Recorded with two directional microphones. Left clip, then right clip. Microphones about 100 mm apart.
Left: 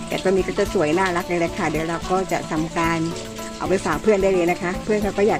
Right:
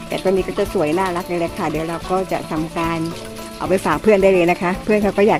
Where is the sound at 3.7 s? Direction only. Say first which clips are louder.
Right 4 dB; 45° right (ahead or behind).